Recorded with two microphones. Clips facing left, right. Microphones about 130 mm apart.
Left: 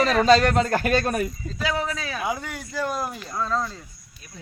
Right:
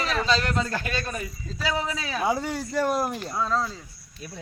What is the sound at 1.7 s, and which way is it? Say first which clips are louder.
Speech: even; centre (ahead or behind).